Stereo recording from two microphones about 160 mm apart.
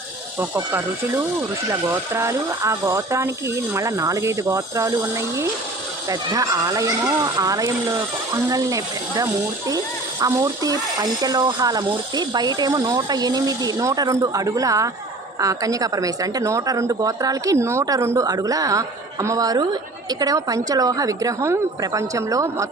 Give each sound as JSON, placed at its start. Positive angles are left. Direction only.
{"t": 0.3, "sound": "speech", "side_deg": -15}